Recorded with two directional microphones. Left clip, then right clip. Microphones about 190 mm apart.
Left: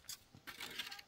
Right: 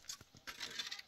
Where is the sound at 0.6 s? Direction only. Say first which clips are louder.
Right 2 dB; 40° left (ahead or behind).